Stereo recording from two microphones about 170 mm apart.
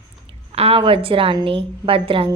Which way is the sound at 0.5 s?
35° right (ahead or behind).